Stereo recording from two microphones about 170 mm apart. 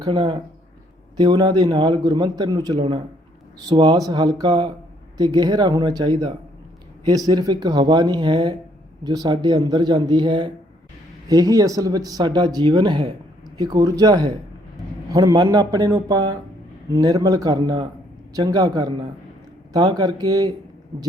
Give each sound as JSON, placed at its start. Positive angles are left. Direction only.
{"t": 0.0, "sound": "speech", "side_deg": -30}
{"t": 2.7, "sound": "speech", "side_deg": -35}
{"t": 3.7, "sound": "speech", "side_deg": -25}